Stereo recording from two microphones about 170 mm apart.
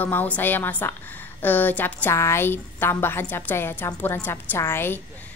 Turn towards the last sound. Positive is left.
turn(degrees=15)  # may be behind; listen again after turning